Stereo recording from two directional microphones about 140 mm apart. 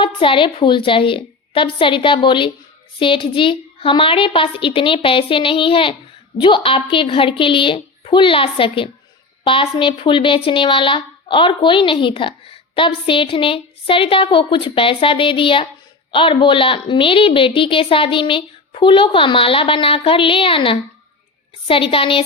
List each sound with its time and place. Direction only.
0.0 s a woman's voice: 35° left (ahead or behind)